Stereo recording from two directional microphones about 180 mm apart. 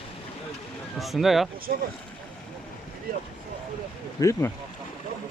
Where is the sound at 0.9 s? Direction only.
Centre (ahead or behind).